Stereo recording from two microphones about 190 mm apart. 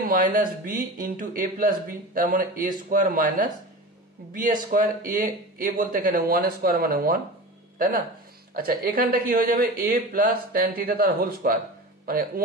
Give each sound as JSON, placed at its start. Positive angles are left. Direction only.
{"t": 0.1, "sound": "speech", "side_deg": -45}
{"t": 8.5, "sound": "speech", "side_deg": -50}